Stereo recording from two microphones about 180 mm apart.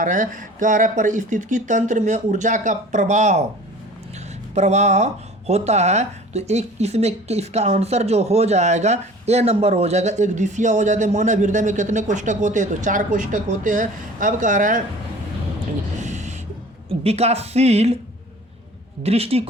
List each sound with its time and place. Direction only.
0.0 s speech: 45° right (ahead or behind)
4.5 s speech: 40° right (ahead or behind)
16.0 s a sound: 40° right (ahead or behind)
16.9 s speech: 35° right (ahead or behind)
19.0 s speech: 35° right (ahead or behind)